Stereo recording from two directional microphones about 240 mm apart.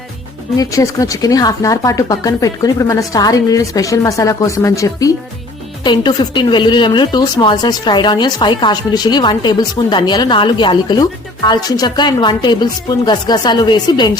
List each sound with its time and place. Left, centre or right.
0.5 s speech: centre